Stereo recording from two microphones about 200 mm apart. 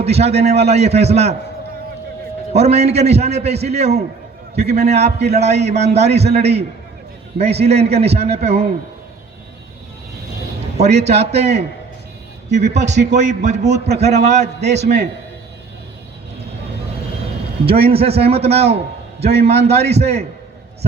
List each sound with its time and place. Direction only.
0.0 s a man's voice: 30° right (ahead or behind)
2.5 s a man's voice: 30° right (ahead or behind)
11.0 s a man's voice: 30° right (ahead or behind)
17.7 s a man's voice: 30° right (ahead or behind)